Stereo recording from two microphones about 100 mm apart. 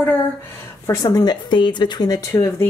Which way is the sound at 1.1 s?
45° left (ahead or behind).